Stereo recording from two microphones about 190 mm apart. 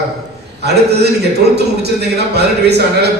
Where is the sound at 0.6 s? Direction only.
60° right (ahead or behind).